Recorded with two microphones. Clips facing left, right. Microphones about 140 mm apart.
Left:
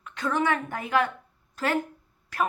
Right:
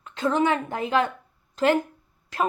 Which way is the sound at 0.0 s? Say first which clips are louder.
Right 4 dB; 25° right (ahead or behind).